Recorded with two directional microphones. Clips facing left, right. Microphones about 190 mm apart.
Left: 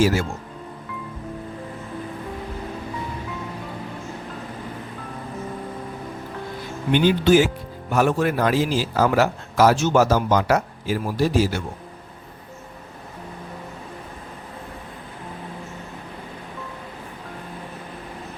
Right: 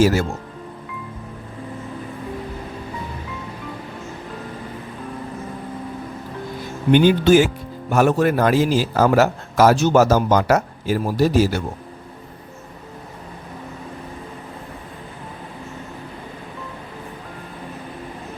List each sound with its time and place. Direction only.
0.0 s speech: 40° right (ahead or behind)
6.9 s a man's voice: 50° right (ahead or behind)